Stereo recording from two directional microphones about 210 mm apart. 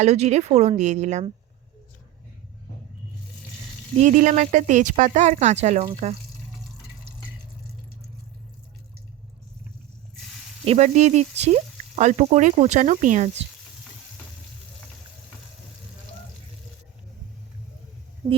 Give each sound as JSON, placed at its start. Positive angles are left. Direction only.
{"t": 0.0, "sound": "speech", "side_deg": -30}
{"t": 4.0, "sound": "speech", "side_deg": -35}
{"t": 10.7, "sound": "speech", "side_deg": -35}